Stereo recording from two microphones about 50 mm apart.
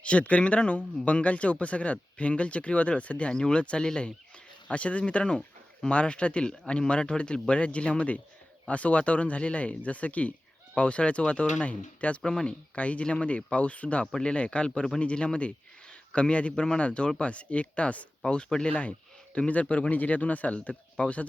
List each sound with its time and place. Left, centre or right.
0.0 s speech: left
12.2 s speech: centre
12.7 s a man's voice: left